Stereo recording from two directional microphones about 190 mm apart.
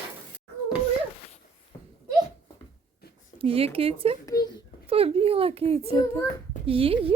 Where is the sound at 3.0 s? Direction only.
55° left (ahead or behind).